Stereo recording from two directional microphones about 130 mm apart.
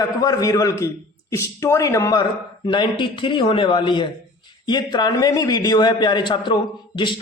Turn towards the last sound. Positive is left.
turn(degrees=35)  # may be behind; listen again after turning